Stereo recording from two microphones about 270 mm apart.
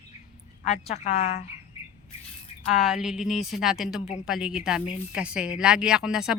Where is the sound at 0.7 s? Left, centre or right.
Left.